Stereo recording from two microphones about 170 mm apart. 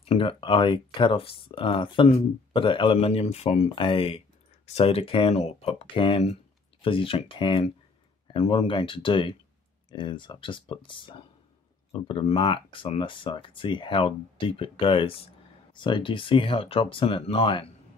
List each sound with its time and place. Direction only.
0.0 s speech: 35° left (ahead or behind)